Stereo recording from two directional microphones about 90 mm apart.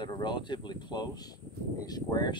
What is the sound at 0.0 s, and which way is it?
Speech, 55° left (ahead or behind).